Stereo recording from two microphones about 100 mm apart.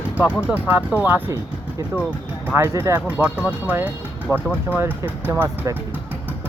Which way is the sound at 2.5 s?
25° right (ahead or behind).